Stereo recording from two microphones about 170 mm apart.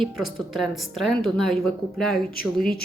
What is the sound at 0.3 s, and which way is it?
A woman's voice, centre (ahead or behind).